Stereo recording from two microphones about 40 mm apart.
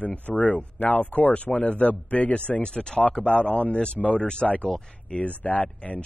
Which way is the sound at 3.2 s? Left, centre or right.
Left.